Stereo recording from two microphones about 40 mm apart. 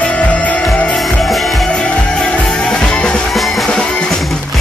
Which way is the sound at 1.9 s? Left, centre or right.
Left.